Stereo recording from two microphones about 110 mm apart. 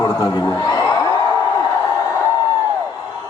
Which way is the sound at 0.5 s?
35° left (ahead or behind).